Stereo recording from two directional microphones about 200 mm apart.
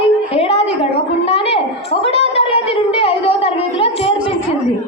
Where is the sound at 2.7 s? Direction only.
30° left (ahead or behind).